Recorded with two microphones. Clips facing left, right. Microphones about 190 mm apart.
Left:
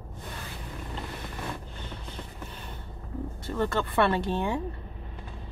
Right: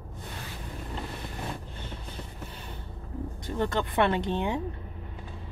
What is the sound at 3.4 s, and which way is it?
Speech, 15° right (ahead or behind).